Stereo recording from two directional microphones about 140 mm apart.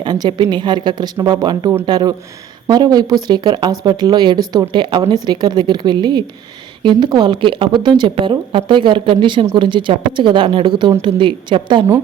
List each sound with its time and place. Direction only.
0.0 s speech: 30° right (ahead or behind)